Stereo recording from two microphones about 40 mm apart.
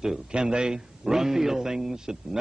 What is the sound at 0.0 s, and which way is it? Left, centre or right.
A man's voice, centre.